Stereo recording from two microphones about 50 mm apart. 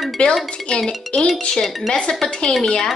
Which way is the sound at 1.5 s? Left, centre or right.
Centre.